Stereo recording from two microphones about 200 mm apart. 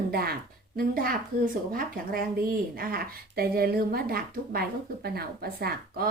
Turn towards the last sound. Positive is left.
turn(degrees=-50)  # may be behind; listen again after turning